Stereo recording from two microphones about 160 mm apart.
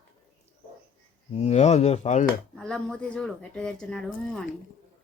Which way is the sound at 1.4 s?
45° left (ahead or behind).